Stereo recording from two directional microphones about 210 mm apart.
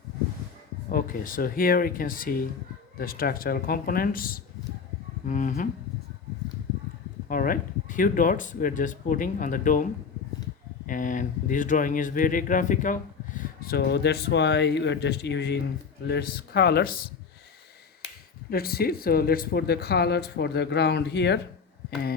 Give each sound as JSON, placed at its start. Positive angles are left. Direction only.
{"t": 0.9, "sound": "speech", "side_deg": 45}
{"t": 7.3, "sound": "speech", "side_deg": 40}
{"t": 18.5, "sound": "speech", "side_deg": 45}